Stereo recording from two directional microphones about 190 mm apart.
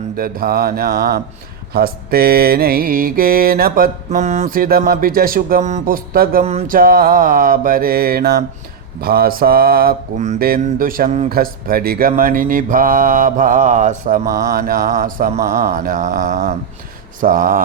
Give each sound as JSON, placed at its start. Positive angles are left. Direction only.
{"t": 0.2, "sound": "mantra", "side_deg": -50}
{"t": 6.4, "sound": "a sound", "side_deg": -35}
{"t": 6.7, "sound": "mantra", "side_deg": -50}
{"t": 14.3, "sound": "mantra", "side_deg": -50}